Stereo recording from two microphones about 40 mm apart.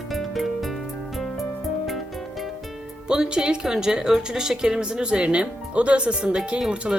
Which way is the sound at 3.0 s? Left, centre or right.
Right.